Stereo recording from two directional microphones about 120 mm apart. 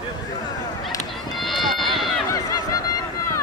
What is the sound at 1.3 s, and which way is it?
Run, centre (ahead or behind).